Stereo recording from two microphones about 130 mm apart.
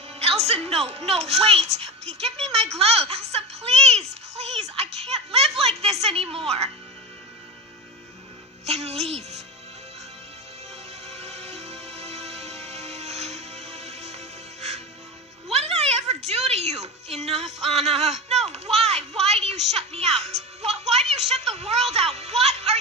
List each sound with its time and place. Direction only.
0.2 s a child's voice: 50° right (ahead or behind)
8.6 s speech: 55° right (ahead or behind)
11.1 s music: 55° right (ahead or behind)
15.5 s a woman's voice: 55° right (ahead or behind)